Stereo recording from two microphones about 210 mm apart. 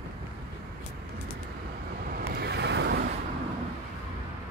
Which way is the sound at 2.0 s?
45° right (ahead or behind).